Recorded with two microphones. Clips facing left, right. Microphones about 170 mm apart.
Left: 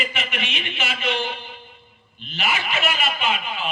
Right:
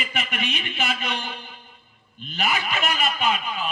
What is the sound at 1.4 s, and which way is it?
A man's voice, 45° right (ahead or behind).